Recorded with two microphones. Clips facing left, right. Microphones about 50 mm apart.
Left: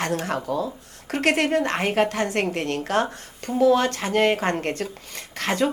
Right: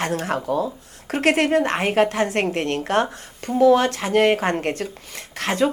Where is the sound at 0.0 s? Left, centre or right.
Right.